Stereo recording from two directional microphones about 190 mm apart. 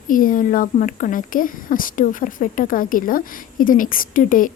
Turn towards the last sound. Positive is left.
turn(degrees=45)  # may be behind; listen again after turning